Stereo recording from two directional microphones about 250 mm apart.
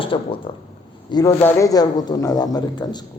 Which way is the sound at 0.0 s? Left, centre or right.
Left.